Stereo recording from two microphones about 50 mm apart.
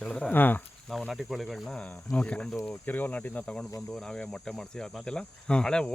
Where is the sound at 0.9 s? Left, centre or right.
Centre.